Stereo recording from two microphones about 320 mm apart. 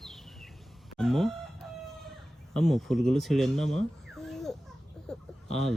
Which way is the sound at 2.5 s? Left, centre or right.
Centre.